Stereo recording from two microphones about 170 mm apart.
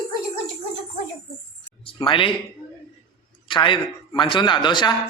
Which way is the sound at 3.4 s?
30° left (ahead or behind).